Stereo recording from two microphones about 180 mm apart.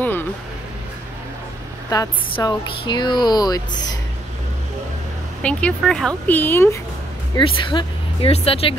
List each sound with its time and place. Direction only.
0.0 s music: 10° left (ahead or behind)
1.9 s speech: 20° left (ahead or behind)
5.4 s speech: 5° left (ahead or behind)
7.3 s speech: 25° left (ahead or behind)